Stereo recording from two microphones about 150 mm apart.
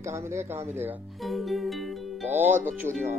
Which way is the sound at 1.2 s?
Centre (ahead or behind).